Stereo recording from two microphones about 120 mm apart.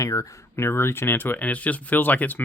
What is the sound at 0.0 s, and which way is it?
Speech, 25° left (ahead or behind).